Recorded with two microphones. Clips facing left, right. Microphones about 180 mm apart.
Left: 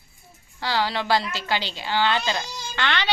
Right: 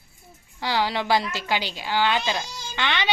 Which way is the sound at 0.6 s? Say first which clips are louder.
Even; 15° right (ahead or behind).